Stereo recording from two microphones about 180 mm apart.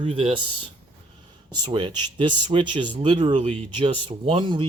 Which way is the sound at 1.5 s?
25° right (ahead or behind).